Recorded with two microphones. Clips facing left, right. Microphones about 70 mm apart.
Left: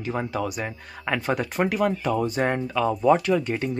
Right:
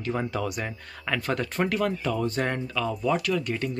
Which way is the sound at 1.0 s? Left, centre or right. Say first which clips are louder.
Left 3 dB; centre.